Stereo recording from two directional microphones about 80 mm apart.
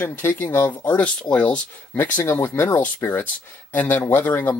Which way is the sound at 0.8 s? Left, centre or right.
Centre.